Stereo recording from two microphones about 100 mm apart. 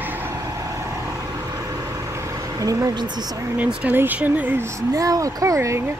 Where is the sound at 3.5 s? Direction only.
15° right (ahead or behind).